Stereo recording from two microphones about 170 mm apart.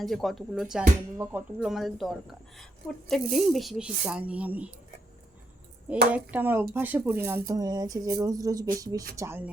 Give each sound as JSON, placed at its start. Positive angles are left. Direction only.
{"t": 0.0, "sound": "speech", "side_deg": 0}
{"t": 1.5, "sound": "speech", "side_deg": 0}
{"t": 6.1, "sound": "speech", "side_deg": -10}